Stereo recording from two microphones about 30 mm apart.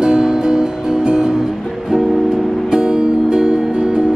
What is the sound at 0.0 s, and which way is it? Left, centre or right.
Music, centre.